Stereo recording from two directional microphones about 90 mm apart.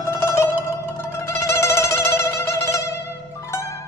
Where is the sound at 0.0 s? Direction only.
30° left (ahead or behind).